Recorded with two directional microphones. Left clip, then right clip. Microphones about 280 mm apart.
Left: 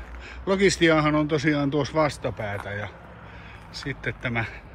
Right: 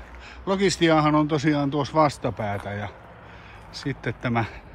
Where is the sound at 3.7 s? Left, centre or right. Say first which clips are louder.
Even; centre.